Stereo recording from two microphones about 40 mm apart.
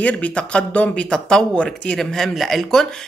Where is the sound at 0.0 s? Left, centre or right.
Left.